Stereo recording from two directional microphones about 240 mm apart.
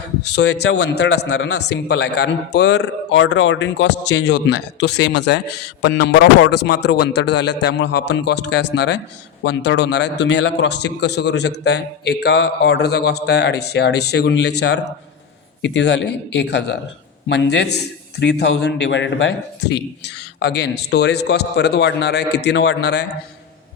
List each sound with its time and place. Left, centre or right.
0.3 s a man's voice: left